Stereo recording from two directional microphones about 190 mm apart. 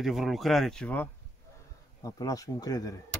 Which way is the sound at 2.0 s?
20° left (ahead or behind).